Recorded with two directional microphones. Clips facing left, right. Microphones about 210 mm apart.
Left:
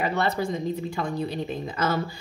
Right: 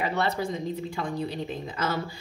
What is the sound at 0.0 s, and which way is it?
Speech, 45° left (ahead or behind).